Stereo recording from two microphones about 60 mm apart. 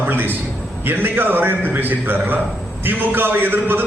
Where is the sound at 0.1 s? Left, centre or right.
Right.